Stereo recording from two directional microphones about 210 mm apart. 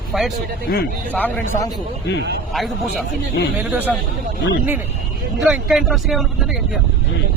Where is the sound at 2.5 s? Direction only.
Centre (ahead or behind).